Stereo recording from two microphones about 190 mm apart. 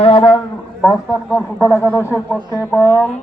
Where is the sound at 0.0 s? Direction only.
30° left (ahead or behind).